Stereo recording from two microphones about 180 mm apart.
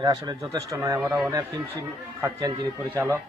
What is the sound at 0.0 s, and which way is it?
A man's voice, 20° right (ahead or behind).